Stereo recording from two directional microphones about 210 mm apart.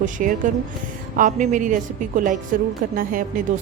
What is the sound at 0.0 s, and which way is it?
Speech, 40° right (ahead or behind).